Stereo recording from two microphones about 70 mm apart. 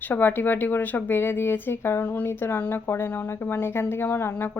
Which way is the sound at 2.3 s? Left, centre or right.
Left.